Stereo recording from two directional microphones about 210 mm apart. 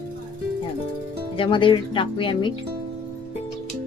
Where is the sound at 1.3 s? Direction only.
25° left (ahead or behind).